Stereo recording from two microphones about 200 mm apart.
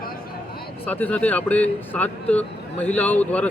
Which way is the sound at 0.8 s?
10° left (ahead or behind).